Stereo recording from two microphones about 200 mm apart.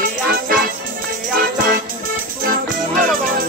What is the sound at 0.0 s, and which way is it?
Music, 45° right (ahead or behind).